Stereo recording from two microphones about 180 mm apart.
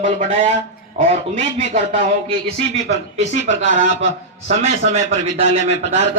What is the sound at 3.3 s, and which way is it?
Speech, 90° left.